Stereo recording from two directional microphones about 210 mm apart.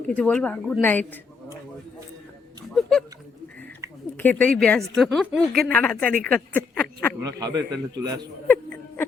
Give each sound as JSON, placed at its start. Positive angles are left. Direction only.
{"t": 0.1, "sound": "a woman's voice", "side_deg": 5}
{"t": 4.2, "sound": "a woman's voice", "side_deg": 5}
{"t": 7.2, "sound": "a man's voice", "side_deg": -15}
{"t": 8.4, "sound": "a sound", "side_deg": 10}